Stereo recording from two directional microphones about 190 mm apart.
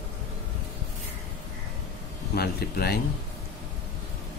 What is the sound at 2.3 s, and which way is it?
Speech, 55° left (ahead or behind).